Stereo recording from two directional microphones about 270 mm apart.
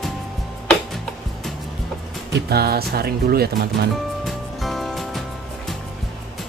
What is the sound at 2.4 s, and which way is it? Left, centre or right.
Speech, right.